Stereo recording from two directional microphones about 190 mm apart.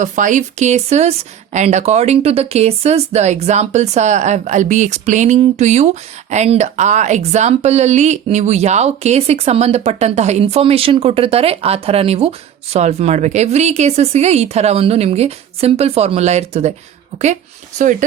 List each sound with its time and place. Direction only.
0.0 s speech: 40° right (ahead or behind)